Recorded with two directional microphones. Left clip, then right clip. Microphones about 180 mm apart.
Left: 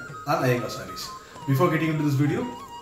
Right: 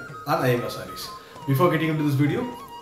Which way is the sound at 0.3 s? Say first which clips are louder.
Right 1 dB; centre (ahead or behind).